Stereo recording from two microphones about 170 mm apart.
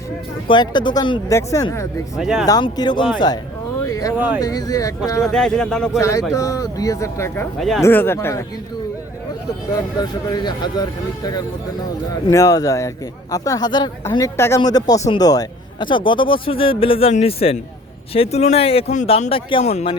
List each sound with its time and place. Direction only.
0.4 s speech: 25° left (ahead or behind)
1.3 s speech: 20° left (ahead or behind)
2.1 s speech: centre (ahead or behind)
2.5 s speech: 25° left (ahead or behind)
3.8 s a sound: 20° left (ahead or behind)
4.4 s speech: 20° left (ahead or behind)
5.3 s speech: 5° left (ahead or behind)
6.0 s speech: 20° left (ahead or behind)
9.7 s speech: 25° left (ahead or behind)
12.3 s a man's voice: 20° left (ahead or behind); by 20.0 s 35° left (ahead or behind)